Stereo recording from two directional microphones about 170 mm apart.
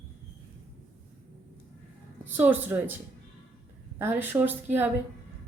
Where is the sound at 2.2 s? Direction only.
10° right (ahead or behind).